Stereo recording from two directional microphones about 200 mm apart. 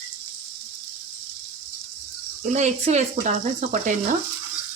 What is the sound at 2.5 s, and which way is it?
Speech, 35° right (ahead or behind).